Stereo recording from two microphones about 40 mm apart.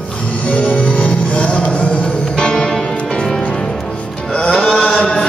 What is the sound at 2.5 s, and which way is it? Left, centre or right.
Music, centre.